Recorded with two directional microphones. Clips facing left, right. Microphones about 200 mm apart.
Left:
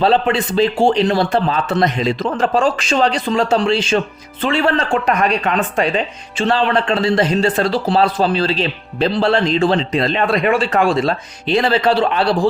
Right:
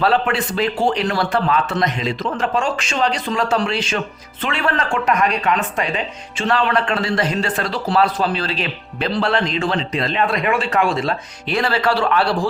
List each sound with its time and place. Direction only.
0.0 s a man's voice: 25° left (ahead or behind)